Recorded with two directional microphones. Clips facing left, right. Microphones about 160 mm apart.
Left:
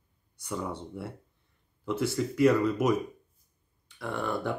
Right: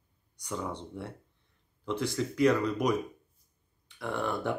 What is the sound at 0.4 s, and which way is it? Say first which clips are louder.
Speech: left 1 dB; 5° left (ahead or behind).